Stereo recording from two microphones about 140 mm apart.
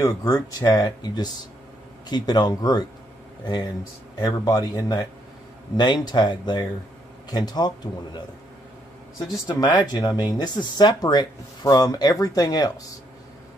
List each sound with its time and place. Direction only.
0.0 s speech: 25° left (ahead or behind)
4.2 s speech: 30° left (ahead or behind)
9.3 s speech: 30° left (ahead or behind)